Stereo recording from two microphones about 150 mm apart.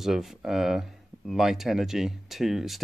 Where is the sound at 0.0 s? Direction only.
Centre (ahead or behind).